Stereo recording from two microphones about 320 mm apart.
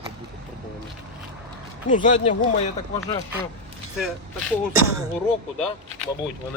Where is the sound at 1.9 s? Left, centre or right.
Left.